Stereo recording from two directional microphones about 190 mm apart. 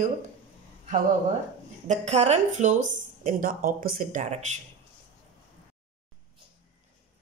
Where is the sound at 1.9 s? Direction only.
35° right (ahead or behind).